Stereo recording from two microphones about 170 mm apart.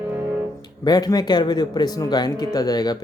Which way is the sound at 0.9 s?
20° left (ahead or behind).